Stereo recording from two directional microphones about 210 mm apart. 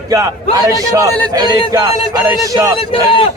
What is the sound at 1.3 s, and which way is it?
A man's voice, 20° right (ahead or behind).